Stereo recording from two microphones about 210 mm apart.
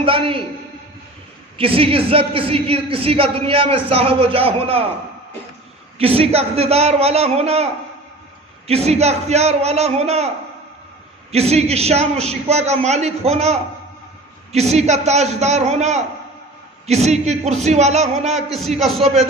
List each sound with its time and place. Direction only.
0.0 s a sound: 25° right (ahead or behind)
1.5 s a woman's voice: 25° right (ahead or behind)
6.0 s a woman's voice: 30° right (ahead or behind)